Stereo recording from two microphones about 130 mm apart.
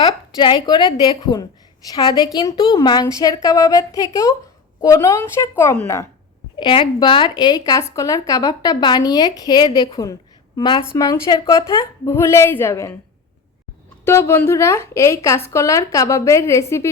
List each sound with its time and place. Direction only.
0.0 s a woman's voice: 35° left (ahead or behind); by 5.8 s 15° left (ahead or behind)
6.6 s a woman's voice: 40° left (ahead or behind); by 13.0 s 20° left (ahead or behind)
14.0 s a woman's voice: 20° left (ahead or behind)